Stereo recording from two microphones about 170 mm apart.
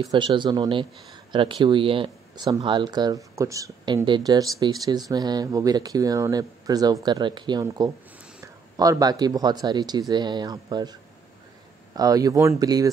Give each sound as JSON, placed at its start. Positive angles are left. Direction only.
{"t": 0.0, "sound": "speech", "side_deg": -25}